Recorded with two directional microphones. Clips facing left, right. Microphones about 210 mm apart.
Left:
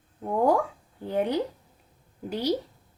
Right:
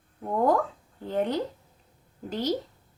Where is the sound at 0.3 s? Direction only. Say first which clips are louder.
Left 1 dB; 10° left (ahead or behind).